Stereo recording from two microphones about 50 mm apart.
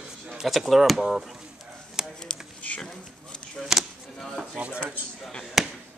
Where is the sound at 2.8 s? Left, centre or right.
Centre.